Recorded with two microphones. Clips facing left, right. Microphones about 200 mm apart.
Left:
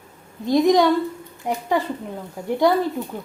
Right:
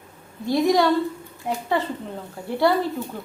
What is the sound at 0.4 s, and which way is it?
A woman's voice, 20° left (ahead or behind).